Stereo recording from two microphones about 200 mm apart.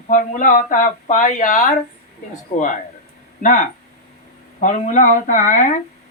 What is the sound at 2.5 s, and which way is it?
Speech, 35° left (ahead or behind).